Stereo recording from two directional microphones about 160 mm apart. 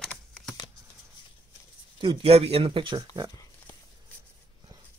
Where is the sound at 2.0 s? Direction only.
35° right (ahead or behind).